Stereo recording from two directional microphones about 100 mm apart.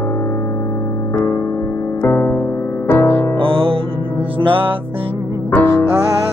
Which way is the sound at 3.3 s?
65° right (ahead or behind).